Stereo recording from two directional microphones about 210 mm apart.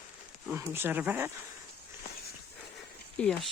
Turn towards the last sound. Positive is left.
turn(degrees=5)  # may be behind; listen again after turning